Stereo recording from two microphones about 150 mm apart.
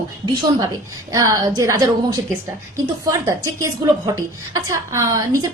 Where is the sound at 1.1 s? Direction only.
20° right (ahead or behind).